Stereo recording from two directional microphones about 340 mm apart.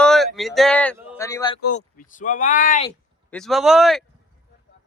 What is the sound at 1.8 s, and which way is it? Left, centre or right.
Speech, left.